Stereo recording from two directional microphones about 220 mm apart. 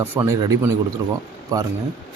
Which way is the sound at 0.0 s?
10° right (ahead or behind).